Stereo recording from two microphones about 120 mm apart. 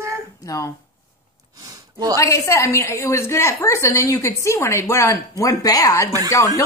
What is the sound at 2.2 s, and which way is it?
A woman's voice, 25° left (ahead or behind).